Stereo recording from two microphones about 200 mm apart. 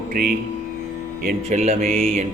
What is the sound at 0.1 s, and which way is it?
Speech, 45° right (ahead or behind).